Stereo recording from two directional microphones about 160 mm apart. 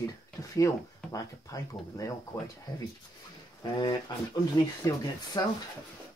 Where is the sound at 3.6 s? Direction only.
25° left (ahead or behind).